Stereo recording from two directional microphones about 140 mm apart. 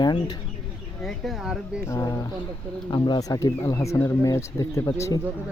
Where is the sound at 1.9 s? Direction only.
20° left (ahead or behind).